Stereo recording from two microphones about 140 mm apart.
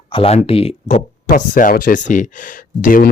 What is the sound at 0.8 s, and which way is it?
Speech, 65° left (ahead or behind).